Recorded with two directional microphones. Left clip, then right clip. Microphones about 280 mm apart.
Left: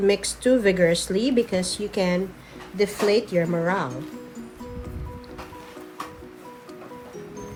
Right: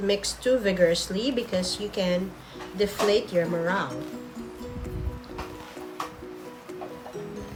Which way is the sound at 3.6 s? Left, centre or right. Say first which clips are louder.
Left 2 dB; left.